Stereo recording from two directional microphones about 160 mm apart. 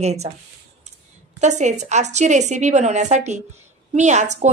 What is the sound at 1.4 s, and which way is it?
A woman's voice, 45° right (ahead or behind).